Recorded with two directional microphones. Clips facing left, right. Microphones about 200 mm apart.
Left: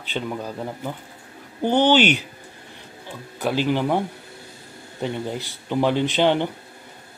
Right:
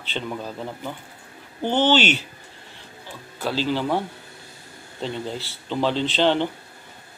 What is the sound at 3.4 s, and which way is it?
Speech, 15° left (ahead or behind).